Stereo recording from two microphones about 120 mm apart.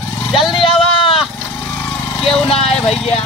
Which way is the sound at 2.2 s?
5° left (ahead or behind).